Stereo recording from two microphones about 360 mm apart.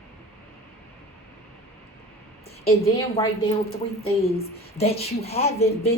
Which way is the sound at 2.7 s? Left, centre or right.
Centre.